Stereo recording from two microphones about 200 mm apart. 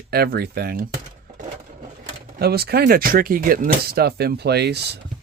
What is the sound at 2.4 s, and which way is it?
Speech, 50° right (ahead or behind).